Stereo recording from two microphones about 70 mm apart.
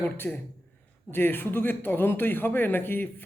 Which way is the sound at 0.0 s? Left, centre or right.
Left.